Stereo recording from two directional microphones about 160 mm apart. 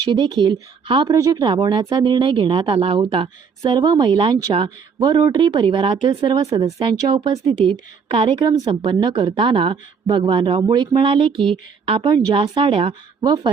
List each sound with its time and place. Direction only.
0.0 s speech: 25° right (ahead or behind)